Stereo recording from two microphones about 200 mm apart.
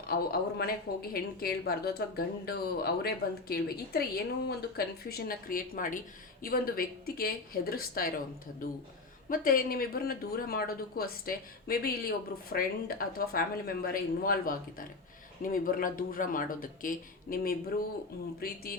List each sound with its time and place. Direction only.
0.1 s speech: 50° left (ahead or behind)
9.3 s speech: 45° left (ahead or behind)